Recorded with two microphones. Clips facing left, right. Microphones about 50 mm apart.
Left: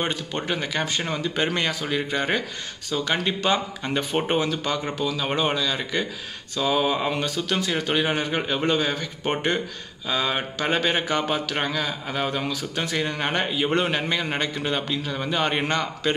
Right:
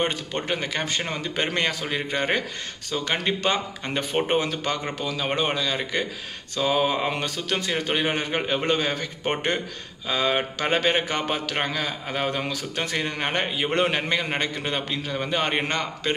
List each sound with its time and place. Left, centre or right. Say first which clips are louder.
0.1 s a man's voice: even; right
6.8 s a man's voice: even; right
7.9 s a man's voice: left 1 dB; right
8.6 s a man's voice: left 3 dB; right
10.0 s a man's voice: right 1 dB; right